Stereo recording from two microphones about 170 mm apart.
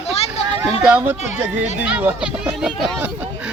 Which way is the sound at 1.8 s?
10° right (ahead or behind).